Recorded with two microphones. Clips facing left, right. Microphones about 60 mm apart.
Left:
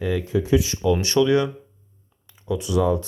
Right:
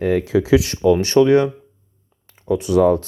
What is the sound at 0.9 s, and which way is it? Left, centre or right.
Speech, right.